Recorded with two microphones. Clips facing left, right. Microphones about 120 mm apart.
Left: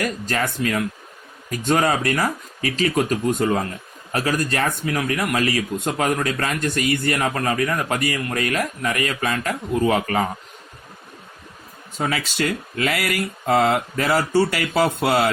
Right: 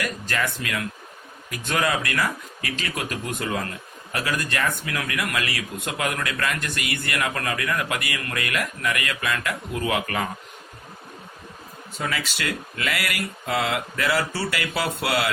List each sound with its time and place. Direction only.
0.0 s speech: 40° left (ahead or behind)
11.9 s speech: 45° left (ahead or behind)